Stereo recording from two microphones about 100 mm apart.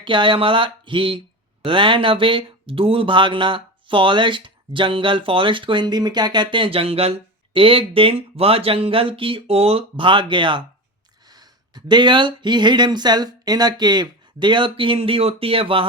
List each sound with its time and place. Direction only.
0.0 s speech: 55° right (ahead or behind); by 7.1 s 75° right (ahead or behind)
7.5 s speech: 60° right (ahead or behind)
11.3 s speech: 45° right (ahead or behind); by 15.9 s 60° right (ahead or behind)